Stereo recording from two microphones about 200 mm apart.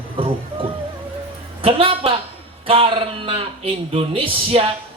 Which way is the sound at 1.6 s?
25° right (ahead or behind).